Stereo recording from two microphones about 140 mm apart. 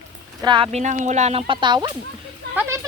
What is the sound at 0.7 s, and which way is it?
Speech, 60° right (ahead or behind).